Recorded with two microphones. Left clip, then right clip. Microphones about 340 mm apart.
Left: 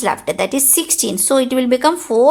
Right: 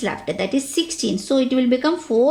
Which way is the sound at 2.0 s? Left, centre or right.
Left.